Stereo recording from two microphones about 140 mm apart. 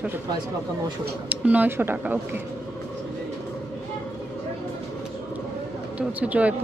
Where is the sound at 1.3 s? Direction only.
10° right (ahead or behind).